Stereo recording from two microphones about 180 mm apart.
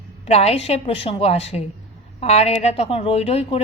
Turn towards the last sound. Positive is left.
turn(degrees=35)  # may be behind; listen again after turning